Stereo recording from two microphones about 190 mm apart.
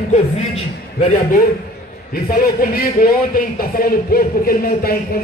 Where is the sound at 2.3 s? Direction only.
50° left (ahead or behind).